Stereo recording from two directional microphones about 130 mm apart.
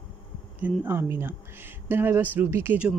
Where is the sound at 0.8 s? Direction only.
15° right (ahead or behind).